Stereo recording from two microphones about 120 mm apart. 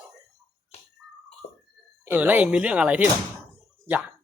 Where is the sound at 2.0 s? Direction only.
15° right (ahead or behind).